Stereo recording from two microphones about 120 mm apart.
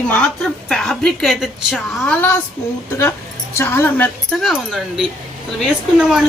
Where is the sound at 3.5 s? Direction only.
20° left (ahead or behind).